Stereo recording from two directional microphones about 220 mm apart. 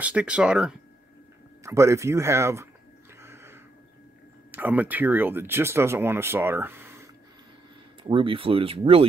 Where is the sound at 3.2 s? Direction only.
10° right (ahead or behind).